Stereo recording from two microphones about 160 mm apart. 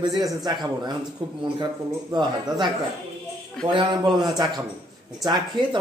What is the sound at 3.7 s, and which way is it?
Speech, 30° right (ahead or behind).